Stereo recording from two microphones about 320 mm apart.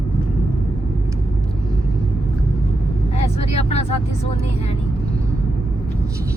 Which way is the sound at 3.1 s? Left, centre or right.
Centre.